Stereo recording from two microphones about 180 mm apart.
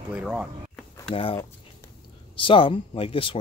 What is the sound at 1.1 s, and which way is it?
A man's voice, 30° left (ahead or behind).